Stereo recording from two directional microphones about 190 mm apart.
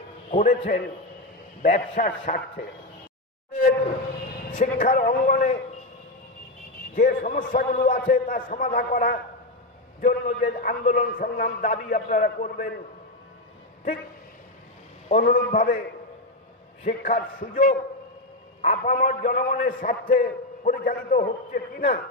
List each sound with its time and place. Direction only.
0.3 s a man's voice: 40° left (ahead or behind)
4.5 s a man's voice: 45° left (ahead or behind)
6.9 s a man's voice: 45° left (ahead or behind)
15.1 s a man's voice: 40° left (ahead or behind)
16.8 s a man's voice: 45° left (ahead or behind)